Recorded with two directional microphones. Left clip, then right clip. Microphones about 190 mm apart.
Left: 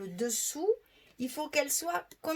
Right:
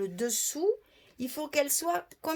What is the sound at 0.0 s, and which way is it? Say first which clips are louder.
Speech: right 3 dB; 40° right (ahead or behind).